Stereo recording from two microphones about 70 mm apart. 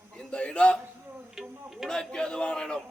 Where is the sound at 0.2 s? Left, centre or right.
Centre.